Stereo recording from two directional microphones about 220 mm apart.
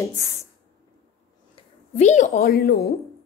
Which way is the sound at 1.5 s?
30° left (ahead or behind).